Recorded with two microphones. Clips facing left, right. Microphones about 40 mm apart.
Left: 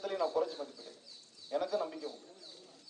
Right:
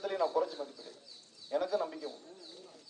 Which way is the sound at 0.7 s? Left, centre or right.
Right.